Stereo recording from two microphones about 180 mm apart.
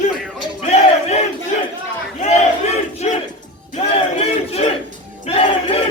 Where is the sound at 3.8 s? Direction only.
35° left (ahead or behind).